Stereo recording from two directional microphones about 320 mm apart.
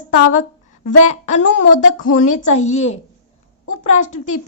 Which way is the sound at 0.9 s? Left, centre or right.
Left.